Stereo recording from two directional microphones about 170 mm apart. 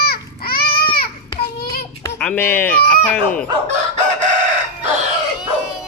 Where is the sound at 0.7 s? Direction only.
30° left (ahead or behind).